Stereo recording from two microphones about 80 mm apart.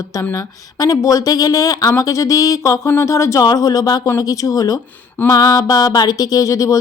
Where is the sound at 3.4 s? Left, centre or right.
Left.